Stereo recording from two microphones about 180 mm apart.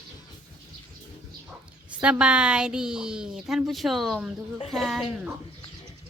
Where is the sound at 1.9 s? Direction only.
5° right (ahead or behind).